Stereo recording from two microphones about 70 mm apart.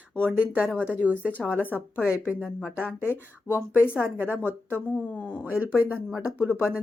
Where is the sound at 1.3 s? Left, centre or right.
Left.